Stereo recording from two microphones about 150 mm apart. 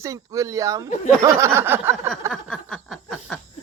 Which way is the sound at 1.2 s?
20° right (ahead or behind).